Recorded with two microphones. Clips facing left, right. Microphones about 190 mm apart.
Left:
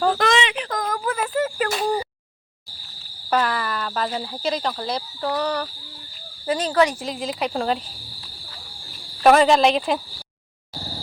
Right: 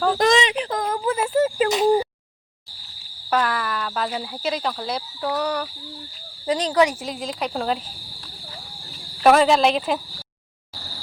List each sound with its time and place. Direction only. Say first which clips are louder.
0.2 s speech: right 2 dB; 40° right (ahead or behind)
0.9 s a sound: right 4 dB; 25° right (ahead or behind)
3.2 s speech: even; centre (ahead or behind)
7.0 s speech: left 2 dB; centre (ahead or behind)
9.2 s speech: left 1 dB; centre (ahead or behind)